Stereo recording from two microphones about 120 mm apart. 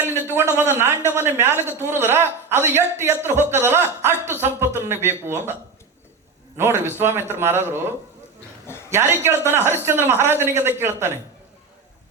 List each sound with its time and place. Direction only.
0.3 s a man's voice: 20° right (ahead or behind)
6.6 s a man's voice: 20° right (ahead or behind)